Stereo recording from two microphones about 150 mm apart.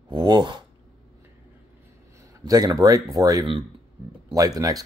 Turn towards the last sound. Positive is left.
turn(degrees=-25)  # may be behind; listen again after turning